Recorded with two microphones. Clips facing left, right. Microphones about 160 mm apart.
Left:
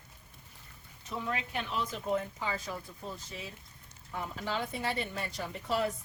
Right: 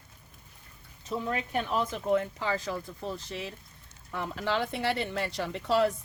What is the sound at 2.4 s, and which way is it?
Speech, 80° right.